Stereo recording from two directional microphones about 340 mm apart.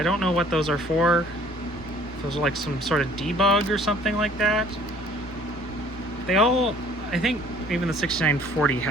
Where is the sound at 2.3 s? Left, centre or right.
Centre.